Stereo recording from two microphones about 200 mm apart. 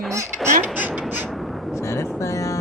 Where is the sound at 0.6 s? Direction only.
10° right (ahead or behind).